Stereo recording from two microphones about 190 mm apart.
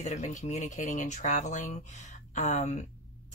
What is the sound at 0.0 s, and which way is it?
Speech, 40° left (ahead or behind).